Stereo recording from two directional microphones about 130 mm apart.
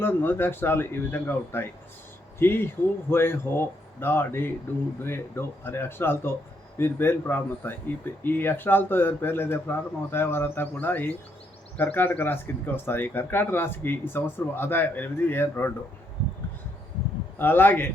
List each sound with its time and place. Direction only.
0.0 s speech: 15° left (ahead or behind)
17.3 s speech: 15° left (ahead or behind)